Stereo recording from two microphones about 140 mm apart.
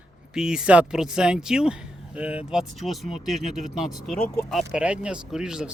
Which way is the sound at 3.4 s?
55° right (ahead or behind).